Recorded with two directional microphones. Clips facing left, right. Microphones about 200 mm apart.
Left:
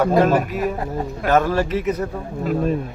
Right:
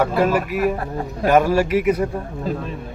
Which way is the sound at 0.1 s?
50° left (ahead or behind).